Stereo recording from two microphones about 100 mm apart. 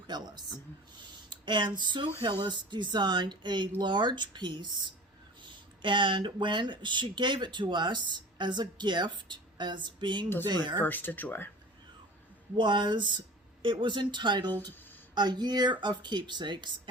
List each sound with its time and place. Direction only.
0.1 s speech: 45° right (ahead or behind)
10.8 s speech: 20° left (ahead or behind)
12.5 s speech: 50° right (ahead or behind)